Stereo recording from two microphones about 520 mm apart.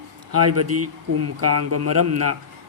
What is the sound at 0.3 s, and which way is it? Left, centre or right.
Speech, right.